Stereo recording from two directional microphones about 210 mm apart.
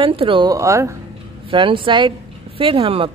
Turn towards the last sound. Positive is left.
turn(degrees=-25)  # may be behind; listen again after turning